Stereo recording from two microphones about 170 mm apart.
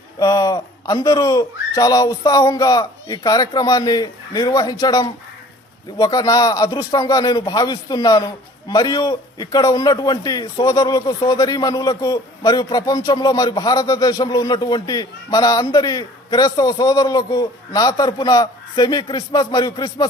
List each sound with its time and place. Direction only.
0.2 s speech: 20° left (ahead or behind)